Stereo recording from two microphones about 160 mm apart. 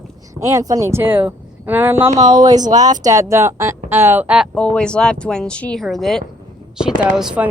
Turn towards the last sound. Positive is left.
turn(degrees=-5)  # may be behind; listen again after turning